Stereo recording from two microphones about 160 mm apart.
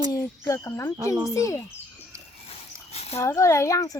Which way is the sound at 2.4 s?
40° left (ahead or behind).